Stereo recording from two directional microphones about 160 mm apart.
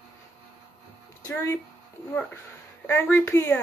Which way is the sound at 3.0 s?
15° left (ahead or behind).